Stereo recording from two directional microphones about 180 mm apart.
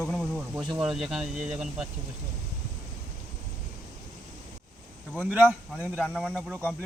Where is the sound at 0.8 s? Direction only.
5° right (ahead or behind).